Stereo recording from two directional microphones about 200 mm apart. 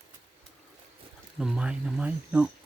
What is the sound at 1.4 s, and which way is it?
Speech, 5° right (ahead or behind).